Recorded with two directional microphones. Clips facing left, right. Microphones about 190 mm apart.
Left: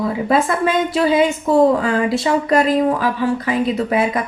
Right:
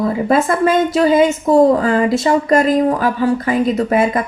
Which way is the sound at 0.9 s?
45° right (ahead or behind).